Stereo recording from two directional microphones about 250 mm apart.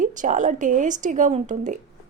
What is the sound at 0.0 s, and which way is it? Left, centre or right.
A woman's voice, right.